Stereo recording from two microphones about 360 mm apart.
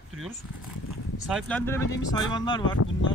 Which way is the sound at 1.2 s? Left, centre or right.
Centre.